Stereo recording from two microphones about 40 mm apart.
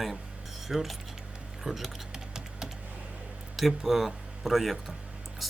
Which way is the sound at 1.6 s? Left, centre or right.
Centre.